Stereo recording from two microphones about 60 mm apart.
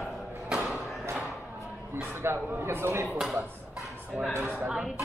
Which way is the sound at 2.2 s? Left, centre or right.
Right.